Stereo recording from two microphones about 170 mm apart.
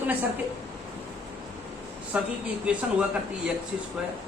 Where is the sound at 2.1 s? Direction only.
5° right (ahead or behind).